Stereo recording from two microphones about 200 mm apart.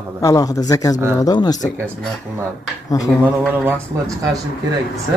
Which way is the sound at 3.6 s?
15° right (ahead or behind).